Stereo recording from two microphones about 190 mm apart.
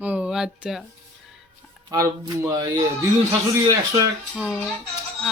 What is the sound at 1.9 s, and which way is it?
Speech, 15° right (ahead or behind).